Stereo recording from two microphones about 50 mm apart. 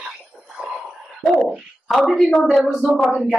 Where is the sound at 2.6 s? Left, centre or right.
Centre.